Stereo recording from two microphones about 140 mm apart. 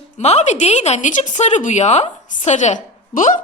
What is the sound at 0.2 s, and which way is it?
A woman's voice, 50° left (ahead or behind).